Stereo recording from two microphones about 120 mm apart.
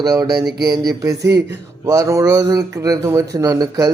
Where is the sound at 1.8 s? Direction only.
30° right (ahead or behind).